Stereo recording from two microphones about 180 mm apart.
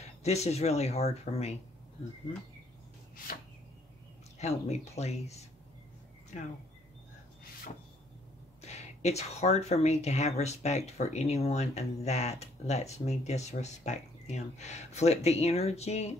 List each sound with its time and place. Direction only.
0.2 s speech: 35° left (ahead or behind)
4.4 s speech: 40° left (ahead or behind)
6.3 s speech: 40° left (ahead or behind)
8.5 s speech: 40° left (ahead or behind)